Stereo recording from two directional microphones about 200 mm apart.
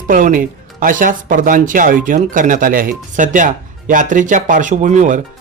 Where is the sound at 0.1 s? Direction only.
40° right (ahead or behind).